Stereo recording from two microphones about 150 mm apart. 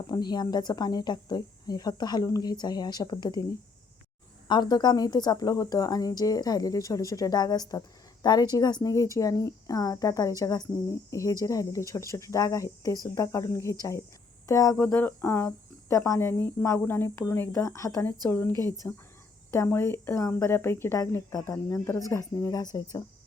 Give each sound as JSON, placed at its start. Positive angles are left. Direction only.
{"t": 0.1, "sound": "speech", "side_deg": 30}
{"t": 4.4, "sound": "speech", "side_deg": 30}